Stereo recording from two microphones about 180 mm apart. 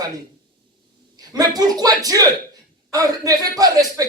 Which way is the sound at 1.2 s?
20° right (ahead or behind).